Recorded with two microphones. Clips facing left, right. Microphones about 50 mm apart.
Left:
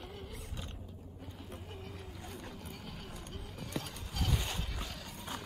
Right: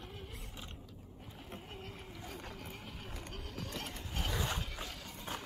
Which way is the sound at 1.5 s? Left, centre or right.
Right.